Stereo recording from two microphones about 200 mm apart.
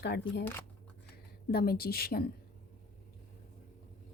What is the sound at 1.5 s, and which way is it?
Speech, 50° left (ahead or behind).